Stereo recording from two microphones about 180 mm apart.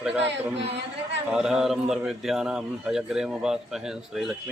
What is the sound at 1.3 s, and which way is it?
A man's voice, 5° right (ahead or behind).